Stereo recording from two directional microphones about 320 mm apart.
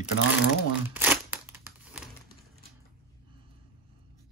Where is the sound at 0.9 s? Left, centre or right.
Centre.